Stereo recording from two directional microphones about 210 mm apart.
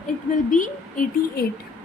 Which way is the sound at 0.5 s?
40° left (ahead or behind).